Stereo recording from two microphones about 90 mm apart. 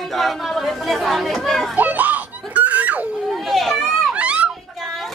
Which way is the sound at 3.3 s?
Centre (ahead or behind).